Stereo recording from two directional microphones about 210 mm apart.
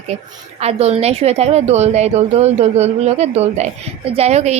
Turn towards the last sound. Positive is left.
turn(degrees=-30)  # may be behind; listen again after turning